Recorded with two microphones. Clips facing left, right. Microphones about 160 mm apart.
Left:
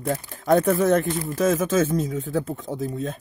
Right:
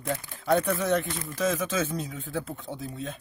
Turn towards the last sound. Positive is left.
turn(degrees=45)  # may be behind; listen again after turning